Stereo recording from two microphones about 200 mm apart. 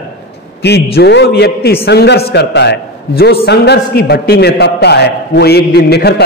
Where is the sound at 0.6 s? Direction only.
55° left (ahead or behind).